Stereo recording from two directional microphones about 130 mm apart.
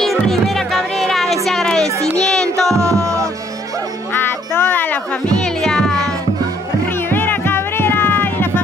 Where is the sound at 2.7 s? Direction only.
25° right (ahead or behind).